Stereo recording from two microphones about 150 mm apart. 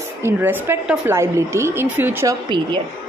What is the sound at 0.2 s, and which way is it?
A woman's voice, 15° right (ahead or behind).